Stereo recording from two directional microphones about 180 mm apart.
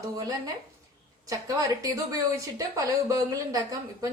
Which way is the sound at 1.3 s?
20° right (ahead or behind).